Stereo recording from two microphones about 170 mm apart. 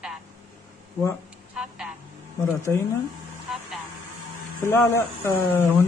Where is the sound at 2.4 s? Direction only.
15° left (ahead or behind).